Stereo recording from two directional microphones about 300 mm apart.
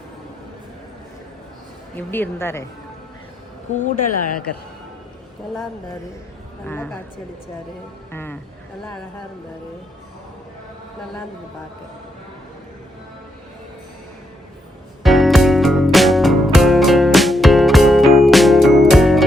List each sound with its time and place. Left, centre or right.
2.0 s speech: centre
3.8 s speech: left
6.7 s a woman's voice: centre
8.1 s a woman's voice: centre
15.0 s music: centre